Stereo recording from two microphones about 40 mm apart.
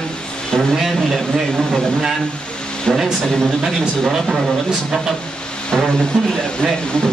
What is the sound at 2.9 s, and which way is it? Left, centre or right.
Speech, centre.